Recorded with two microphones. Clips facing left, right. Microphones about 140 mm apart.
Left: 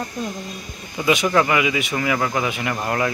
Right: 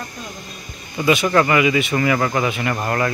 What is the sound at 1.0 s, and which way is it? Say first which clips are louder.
Speech: right 2 dB; 10° left (ahead or behind).